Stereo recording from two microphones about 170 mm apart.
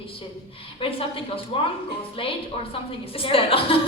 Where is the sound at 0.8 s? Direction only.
35° left (ahead or behind).